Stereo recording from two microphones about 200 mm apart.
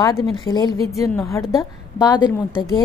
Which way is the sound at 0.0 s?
20° left (ahead or behind).